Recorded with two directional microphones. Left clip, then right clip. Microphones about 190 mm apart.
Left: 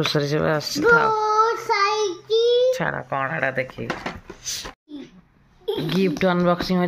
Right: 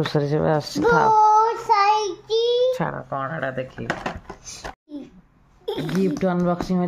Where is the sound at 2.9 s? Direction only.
5° left (ahead or behind).